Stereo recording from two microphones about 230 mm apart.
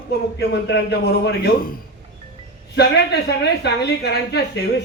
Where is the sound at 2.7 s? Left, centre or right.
Left.